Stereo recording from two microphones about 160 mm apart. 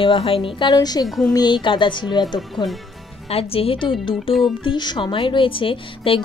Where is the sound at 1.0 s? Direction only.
Centre (ahead or behind).